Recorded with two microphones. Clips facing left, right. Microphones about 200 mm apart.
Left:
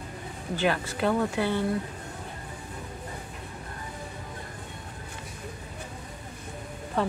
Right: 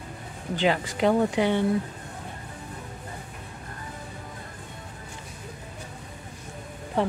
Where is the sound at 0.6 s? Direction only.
15° right (ahead or behind).